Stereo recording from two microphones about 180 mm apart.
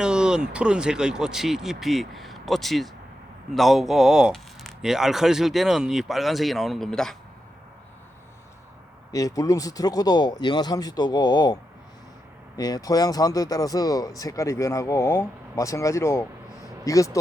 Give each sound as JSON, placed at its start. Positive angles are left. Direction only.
{"t": 0.0, "sound": "speech", "side_deg": -5}
{"t": 9.1, "sound": "speech", "side_deg": 20}
{"t": 12.5, "sound": "speech", "side_deg": 20}